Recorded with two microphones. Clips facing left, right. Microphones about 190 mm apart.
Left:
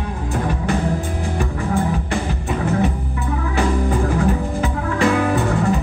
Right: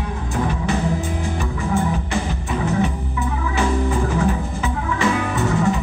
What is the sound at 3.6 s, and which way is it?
Music, 55° left (ahead or behind).